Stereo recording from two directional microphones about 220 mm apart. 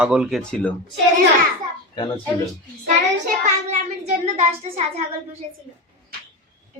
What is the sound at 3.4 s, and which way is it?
Child singing, 30° right (ahead or behind).